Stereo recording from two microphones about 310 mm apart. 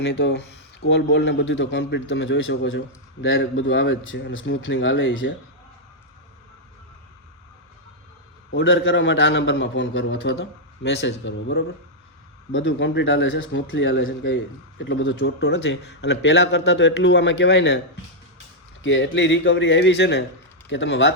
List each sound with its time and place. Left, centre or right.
0.0 s speech: left
8.4 s speech: left
18.8 s speech: left